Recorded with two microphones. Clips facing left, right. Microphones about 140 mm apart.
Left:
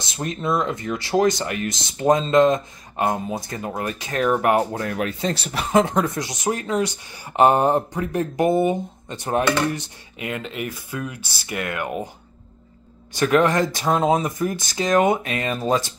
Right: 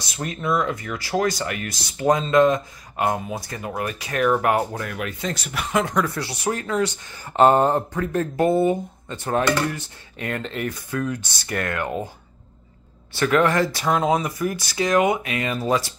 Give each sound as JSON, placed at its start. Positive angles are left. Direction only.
{"t": 0.0, "sound": "speech", "side_deg": 25}
{"t": 13.1, "sound": "speech", "side_deg": 15}